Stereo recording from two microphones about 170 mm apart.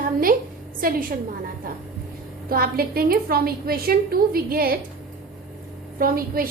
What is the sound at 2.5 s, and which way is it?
A woman's voice, 60° right (ahead or behind).